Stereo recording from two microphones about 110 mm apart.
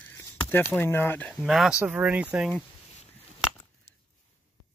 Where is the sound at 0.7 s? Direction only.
20° left (ahead or behind).